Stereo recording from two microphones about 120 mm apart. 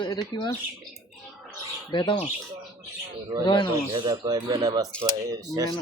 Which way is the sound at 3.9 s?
35° right (ahead or behind).